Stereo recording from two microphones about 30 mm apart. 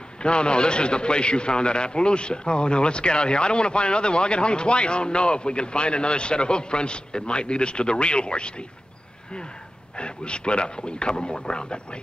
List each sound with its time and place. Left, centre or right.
0.2 s a man's voice: left
9.9 s a man's voice: left